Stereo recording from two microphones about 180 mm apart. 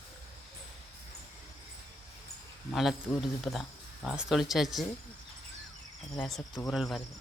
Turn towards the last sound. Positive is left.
turn(degrees=0)  # may be behind; listen again after turning